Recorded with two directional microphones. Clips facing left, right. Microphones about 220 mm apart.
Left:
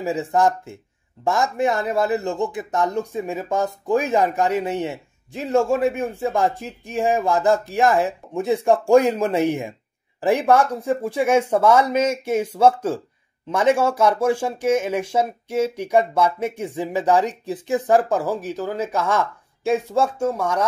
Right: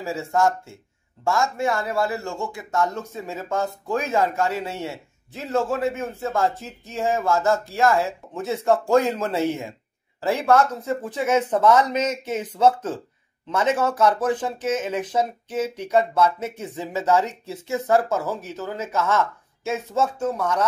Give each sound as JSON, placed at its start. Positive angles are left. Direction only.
{"t": 0.0, "sound": "speech", "side_deg": 15}